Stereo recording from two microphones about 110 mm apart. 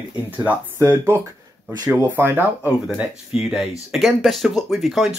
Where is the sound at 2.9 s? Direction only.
5° right (ahead or behind).